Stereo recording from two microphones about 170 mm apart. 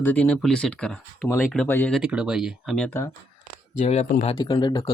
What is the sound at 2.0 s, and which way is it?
Speech, 5° right (ahead or behind).